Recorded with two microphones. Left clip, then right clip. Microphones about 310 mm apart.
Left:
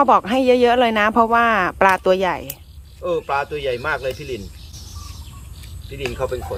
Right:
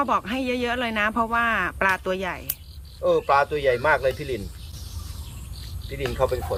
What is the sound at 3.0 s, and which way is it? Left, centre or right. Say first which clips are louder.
Speech: right 2 dB; centre.